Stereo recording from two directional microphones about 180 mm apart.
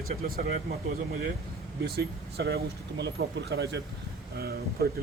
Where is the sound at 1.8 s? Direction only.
65° right (ahead or behind).